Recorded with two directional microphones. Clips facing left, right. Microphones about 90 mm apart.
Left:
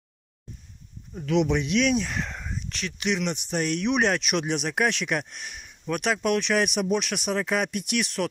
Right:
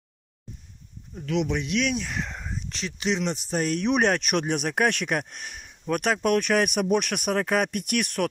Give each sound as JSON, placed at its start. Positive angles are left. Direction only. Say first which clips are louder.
{"t": 1.1, "sound": "speech", "louder": "left 3 dB", "side_deg": 0}
{"t": 2.7, "sound": "speech", "louder": "right 1 dB", "side_deg": -30}